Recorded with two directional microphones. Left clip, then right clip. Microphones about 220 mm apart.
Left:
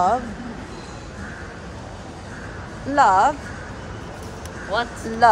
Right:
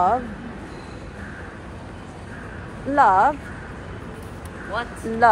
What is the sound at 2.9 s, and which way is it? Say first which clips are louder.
Speech: even; 5° left (ahead or behind).